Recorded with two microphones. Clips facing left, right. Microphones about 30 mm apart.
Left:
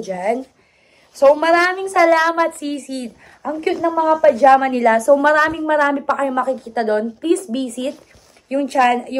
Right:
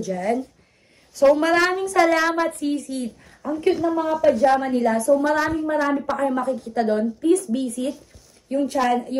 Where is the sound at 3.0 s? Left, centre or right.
Left.